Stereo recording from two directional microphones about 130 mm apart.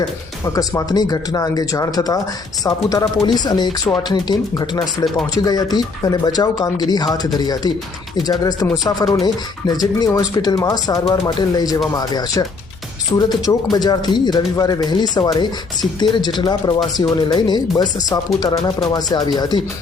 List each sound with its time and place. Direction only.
0.4 s speech: 25° left (ahead or behind)